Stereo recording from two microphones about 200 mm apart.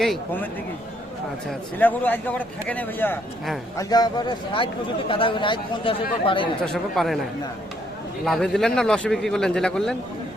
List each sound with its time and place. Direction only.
0.0 s a man's voice: centre (ahead or behind)
1.5 s a man's voice: 10° left (ahead or behind)
3.8 s speech: 20° left (ahead or behind)
6.9 s a man's voice: centre (ahead or behind)
8.2 s a man's voice: centre (ahead or behind)